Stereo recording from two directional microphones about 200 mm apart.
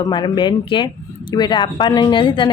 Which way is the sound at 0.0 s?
20° left (ahead or behind).